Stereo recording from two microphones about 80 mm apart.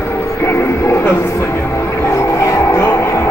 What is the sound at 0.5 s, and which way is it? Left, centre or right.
Music, left.